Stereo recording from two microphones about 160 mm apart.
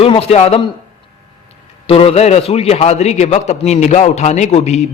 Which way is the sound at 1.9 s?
35° left (ahead or behind).